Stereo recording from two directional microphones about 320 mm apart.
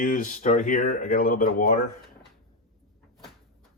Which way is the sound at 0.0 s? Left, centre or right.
Left.